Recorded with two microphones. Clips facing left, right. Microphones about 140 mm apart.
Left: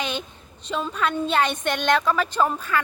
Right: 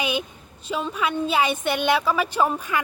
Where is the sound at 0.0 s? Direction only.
10° right (ahead or behind).